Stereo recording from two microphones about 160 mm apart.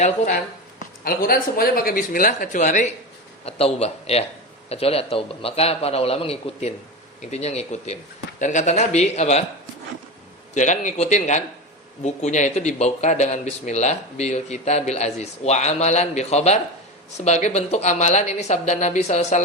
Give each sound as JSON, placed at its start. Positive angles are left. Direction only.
{"t": 1.0, "sound": "speech", "side_deg": 65}
{"t": 3.4, "sound": "a man's voice", "side_deg": 40}
{"t": 10.5, "sound": "speech", "side_deg": 50}